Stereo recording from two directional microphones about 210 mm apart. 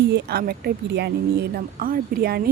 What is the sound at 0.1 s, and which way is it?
A woman's voice, 50° right (ahead or behind).